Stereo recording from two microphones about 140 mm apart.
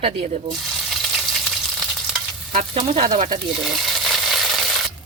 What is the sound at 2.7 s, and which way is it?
Speech, 50° right (ahead or behind).